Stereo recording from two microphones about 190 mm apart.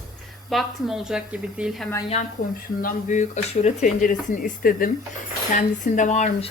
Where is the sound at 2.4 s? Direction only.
40° left (ahead or behind).